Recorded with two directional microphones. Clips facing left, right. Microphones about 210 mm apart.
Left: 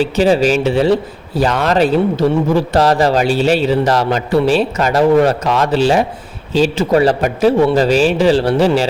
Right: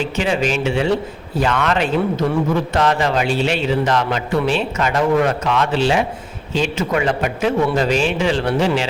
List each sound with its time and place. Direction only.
0.0 s a man's voice: 35° left (ahead or behind)